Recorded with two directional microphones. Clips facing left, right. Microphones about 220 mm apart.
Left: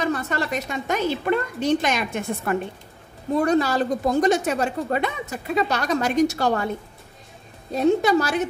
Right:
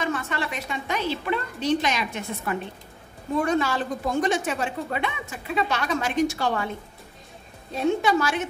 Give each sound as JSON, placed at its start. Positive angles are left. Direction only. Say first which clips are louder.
{"t": 0.0, "sound": "a woman's voice", "louder": "left 3 dB", "side_deg": 40}
{"t": 3.3, "sound": "a woman's voice", "louder": "left 4 dB", "side_deg": 35}
{"t": 7.7, "sound": "a woman's voice", "louder": "left 4 dB", "side_deg": 40}